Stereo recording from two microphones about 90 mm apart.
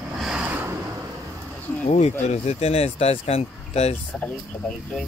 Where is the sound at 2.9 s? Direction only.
90° left.